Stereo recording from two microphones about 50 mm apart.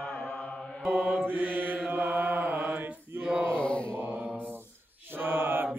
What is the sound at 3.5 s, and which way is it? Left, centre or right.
Mantra, left.